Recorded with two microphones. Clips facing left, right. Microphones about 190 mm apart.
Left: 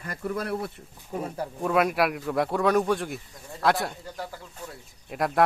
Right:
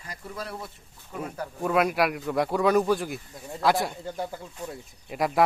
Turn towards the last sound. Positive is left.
turn(degrees=0)  # may be behind; listen again after turning